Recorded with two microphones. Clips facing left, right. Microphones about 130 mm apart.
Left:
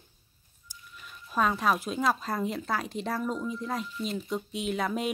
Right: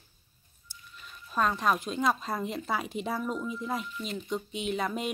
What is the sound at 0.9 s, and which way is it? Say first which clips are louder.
Speech: left 2 dB; 5° left (ahead or behind).